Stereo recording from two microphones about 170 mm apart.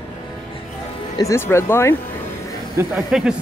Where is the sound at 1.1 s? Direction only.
15° left (ahead or behind).